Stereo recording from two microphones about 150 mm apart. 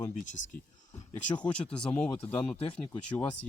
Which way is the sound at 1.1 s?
10° left (ahead or behind).